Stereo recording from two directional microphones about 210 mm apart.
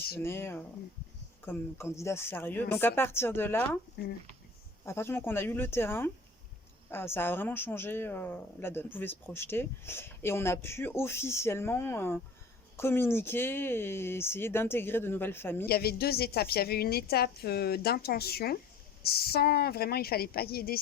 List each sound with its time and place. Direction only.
0.2 s a woman's voice: 10° left (ahead or behind)
4.0 s a woman's voice: 50° left (ahead or behind)
4.9 s a woman's voice: 10° left (ahead or behind)
15.6 s a woman's voice: 45° left (ahead or behind)